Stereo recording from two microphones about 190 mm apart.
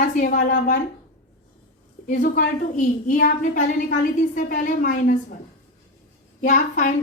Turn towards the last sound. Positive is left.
turn(degrees=45)  # may be behind; listen again after turning